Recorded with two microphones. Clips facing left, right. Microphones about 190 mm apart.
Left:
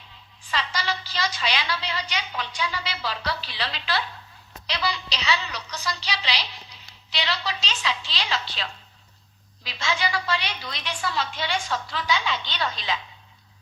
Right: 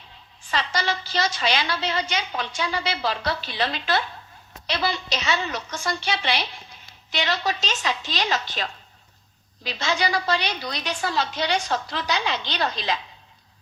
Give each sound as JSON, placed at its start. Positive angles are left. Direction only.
{"t": 0.4, "sound": "a woman's voice", "side_deg": -45}